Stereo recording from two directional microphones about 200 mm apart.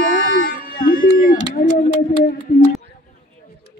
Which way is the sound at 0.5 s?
45° left (ahead or behind).